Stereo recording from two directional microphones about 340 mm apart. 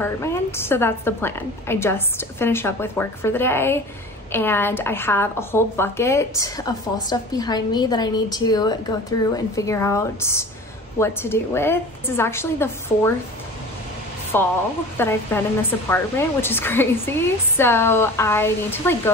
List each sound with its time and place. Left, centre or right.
0.0 s speech: centre
14.3 s speech: centre